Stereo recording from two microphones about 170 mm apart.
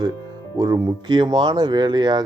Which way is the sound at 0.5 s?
20° right (ahead or behind).